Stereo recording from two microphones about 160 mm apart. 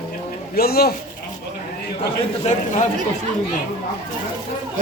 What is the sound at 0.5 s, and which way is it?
Speech, 75° left (ahead or behind).